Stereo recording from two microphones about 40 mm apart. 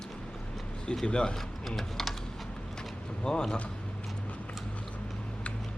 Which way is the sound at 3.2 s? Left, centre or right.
Left.